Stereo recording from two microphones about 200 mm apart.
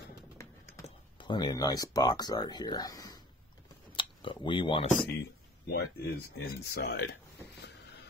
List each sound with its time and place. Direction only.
0.8 s speech: 25° left (ahead or behind)
3.9 s a sound: 25° left (ahead or behind)
5.7 s speech: 50° left (ahead or behind)